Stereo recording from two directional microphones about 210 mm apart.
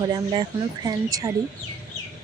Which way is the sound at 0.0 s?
20° right (ahead or behind).